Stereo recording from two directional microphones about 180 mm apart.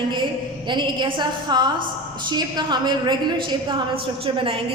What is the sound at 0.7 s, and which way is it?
A woman's voice, 25° right (ahead or behind).